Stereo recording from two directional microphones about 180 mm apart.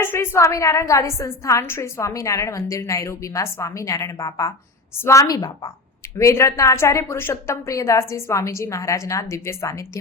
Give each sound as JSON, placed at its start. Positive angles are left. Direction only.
{"t": 0.0, "sound": "a woman's voice", "side_deg": 15}